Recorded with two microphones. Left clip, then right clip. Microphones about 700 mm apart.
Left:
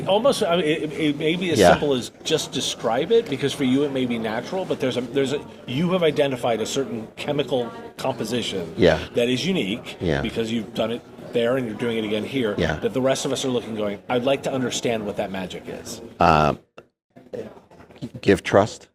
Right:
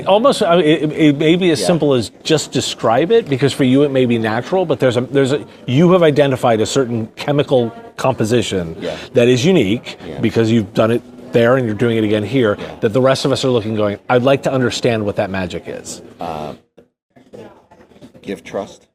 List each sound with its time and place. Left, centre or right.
0.0 s a man's voice: right
9.6 s a man's voice: right
16.1 s speech: left
18.3 s speech: left